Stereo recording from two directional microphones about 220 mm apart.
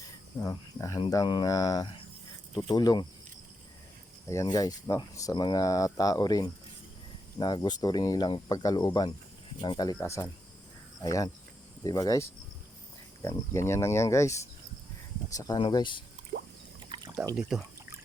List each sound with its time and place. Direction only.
0.3 s speech: 15° left (ahead or behind)
4.3 s speech: 15° left (ahead or behind)
17.3 s pour: centre (ahead or behind)